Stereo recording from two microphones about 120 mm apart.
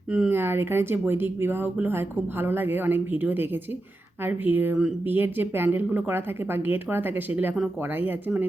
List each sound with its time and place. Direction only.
0.1 s speech: 15° right (ahead or behind)